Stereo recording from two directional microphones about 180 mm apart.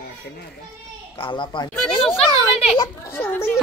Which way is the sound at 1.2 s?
25° left (ahead or behind).